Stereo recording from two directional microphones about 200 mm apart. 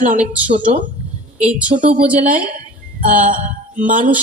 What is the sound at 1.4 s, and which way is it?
Speech, 5° right (ahead or behind).